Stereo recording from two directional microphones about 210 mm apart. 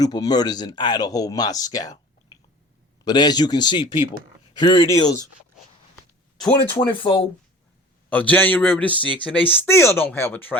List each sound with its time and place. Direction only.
0.0 s speech: 20° left (ahead or behind)
3.0 s speech: 20° left (ahead or behind)
6.7 s speech: 25° left (ahead or behind)
8.1 s speech: 10° left (ahead or behind)